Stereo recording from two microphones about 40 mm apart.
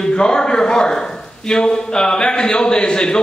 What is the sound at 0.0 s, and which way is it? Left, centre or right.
A man's voice, centre.